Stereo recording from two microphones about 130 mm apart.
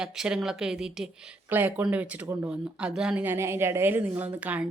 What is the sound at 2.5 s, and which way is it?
A woman's voice, 5° right (ahead or behind).